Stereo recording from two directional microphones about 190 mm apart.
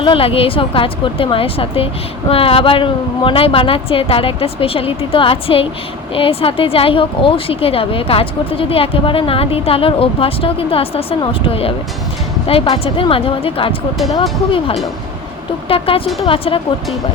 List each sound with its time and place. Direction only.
0.0 s a woman's voice: 30° left (ahead or behind)